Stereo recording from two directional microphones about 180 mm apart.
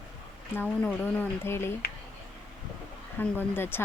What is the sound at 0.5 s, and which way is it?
Speech, 10° left (ahead or behind).